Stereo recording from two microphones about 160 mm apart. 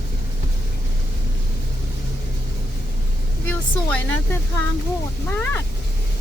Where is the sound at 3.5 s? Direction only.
10° left (ahead or behind).